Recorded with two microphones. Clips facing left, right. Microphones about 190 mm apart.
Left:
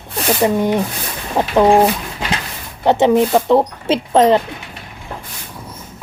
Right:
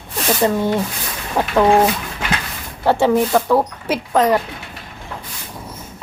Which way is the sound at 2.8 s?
20° left (ahead or behind).